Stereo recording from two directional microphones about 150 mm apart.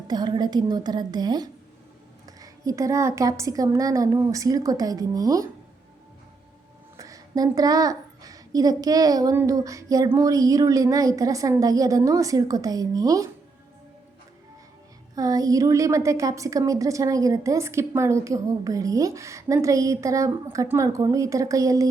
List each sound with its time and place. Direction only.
0.1 s a woman's voice: 25° right (ahead or behind)
6.9 s a woman's voice: 20° right (ahead or behind)
15.1 s a woman's voice: 25° right (ahead or behind)